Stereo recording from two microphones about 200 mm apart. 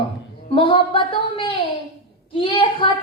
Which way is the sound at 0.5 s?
25° left (ahead or behind).